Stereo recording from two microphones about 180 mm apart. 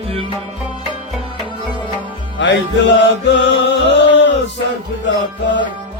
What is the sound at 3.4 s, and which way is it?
Music, 75° left (ahead or behind).